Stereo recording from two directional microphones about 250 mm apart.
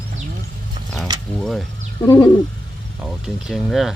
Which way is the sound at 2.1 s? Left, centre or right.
Centre.